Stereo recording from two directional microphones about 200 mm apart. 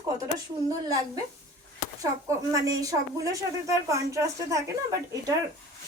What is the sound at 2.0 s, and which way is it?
Speech, 15° right (ahead or behind).